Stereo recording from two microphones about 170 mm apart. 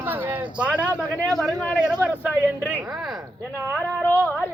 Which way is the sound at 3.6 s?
10° left (ahead or behind).